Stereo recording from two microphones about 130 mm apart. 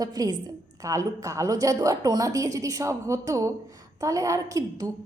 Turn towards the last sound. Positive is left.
turn(degrees=-25)  # may be behind; listen again after turning